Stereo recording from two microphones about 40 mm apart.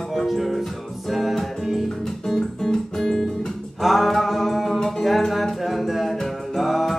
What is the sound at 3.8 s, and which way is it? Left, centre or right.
Music, centre.